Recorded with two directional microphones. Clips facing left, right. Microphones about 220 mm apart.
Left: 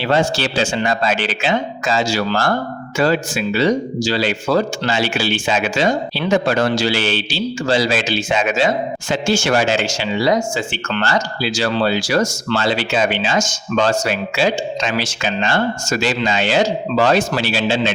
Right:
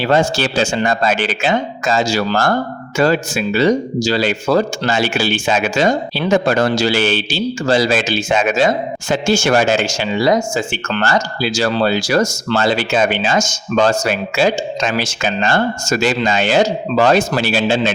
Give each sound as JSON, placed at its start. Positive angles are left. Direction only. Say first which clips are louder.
{"t": 0.0, "sound": "speech", "louder": "right 2 dB", "side_deg": -45}